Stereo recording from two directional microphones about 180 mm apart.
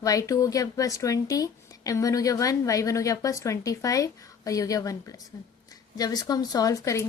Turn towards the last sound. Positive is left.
turn(degrees=15)  # may be behind; listen again after turning